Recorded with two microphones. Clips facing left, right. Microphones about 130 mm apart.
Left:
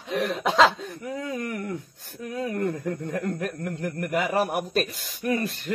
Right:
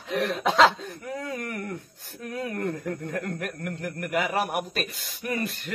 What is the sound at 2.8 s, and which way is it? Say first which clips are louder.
Speech: left 2 dB; 25° left (ahead or behind).